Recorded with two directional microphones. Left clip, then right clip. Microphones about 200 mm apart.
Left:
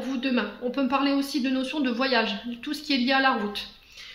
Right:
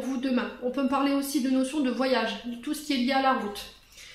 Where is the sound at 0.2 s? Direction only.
40° left (ahead or behind).